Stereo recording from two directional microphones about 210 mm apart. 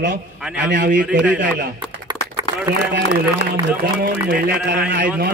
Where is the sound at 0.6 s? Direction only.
55° right (ahead or behind).